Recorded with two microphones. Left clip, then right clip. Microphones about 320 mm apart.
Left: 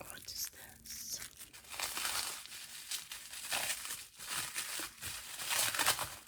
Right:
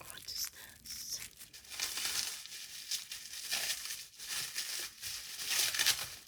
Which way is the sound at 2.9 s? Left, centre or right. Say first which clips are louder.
Right 3 dB; centre.